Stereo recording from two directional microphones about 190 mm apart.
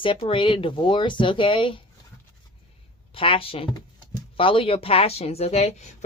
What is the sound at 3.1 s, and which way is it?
A woman's voice, 30° left (ahead or behind).